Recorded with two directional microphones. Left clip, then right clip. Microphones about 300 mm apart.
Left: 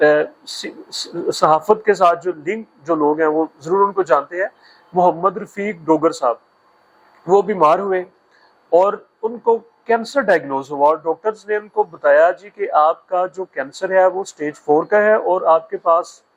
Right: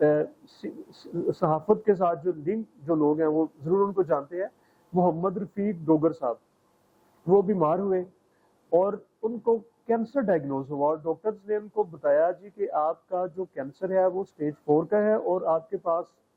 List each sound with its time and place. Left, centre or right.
0.0 s speech: centre
9.8 s speech: centre
11.7 s speech: centre